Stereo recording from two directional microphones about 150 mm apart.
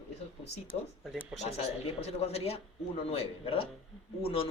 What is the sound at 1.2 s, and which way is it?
Speech, 45° left (ahead or behind).